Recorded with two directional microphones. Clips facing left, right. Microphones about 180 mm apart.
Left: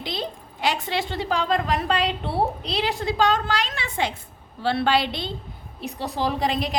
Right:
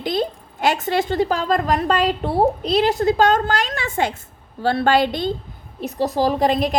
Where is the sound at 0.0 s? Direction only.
50° right (ahead or behind).